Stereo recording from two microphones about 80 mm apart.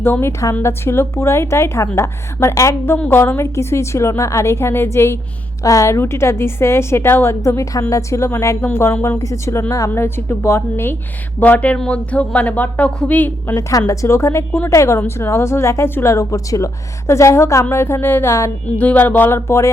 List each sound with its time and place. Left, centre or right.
0.0 s a woman's voice: left
5.6 s a woman's voice: left
5.9 s a woman's voice: left
11.3 s music: left
11.8 s a woman's voice: centre
13.6 s a woman's voice: left
18.8 s music: left
19.5 s a woman's voice: left